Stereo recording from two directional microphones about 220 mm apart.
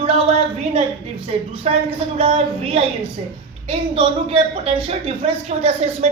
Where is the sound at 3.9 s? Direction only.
25° right (ahead or behind).